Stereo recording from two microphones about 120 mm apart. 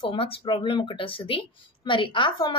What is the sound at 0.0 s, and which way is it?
A woman's voice, 50° left (ahead or behind).